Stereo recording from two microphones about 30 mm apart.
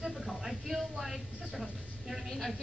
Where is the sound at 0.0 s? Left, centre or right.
Centre.